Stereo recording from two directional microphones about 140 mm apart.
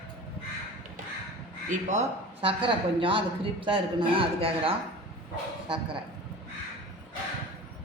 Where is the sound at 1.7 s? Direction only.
60° right (ahead or behind).